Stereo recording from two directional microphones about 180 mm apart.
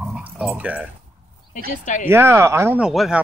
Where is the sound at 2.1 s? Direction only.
15° right (ahead or behind).